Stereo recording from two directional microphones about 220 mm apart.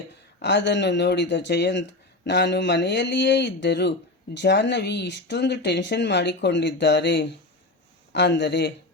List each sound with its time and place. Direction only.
0.3 s speech: 55° left (ahead or behind)